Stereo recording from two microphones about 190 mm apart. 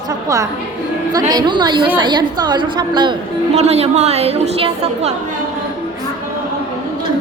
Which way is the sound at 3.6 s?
35° right (ahead or behind).